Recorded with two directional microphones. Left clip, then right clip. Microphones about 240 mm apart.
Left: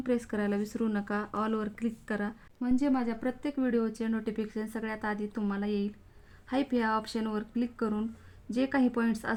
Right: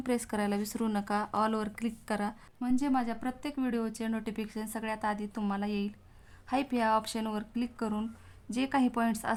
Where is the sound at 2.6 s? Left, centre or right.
Centre.